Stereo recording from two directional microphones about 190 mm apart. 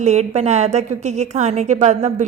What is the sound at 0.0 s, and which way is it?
A woman's voice, 35° right (ahead or behind).